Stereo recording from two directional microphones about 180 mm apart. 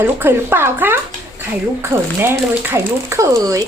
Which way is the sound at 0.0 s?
10° right (ahead or behind).